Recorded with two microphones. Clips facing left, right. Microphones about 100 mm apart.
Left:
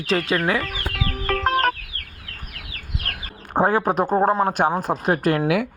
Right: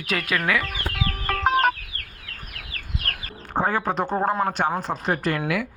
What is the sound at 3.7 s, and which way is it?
Speech, 50° left (ahead or behind).